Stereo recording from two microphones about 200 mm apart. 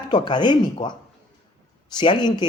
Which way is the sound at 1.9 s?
20° left (ahead or behind).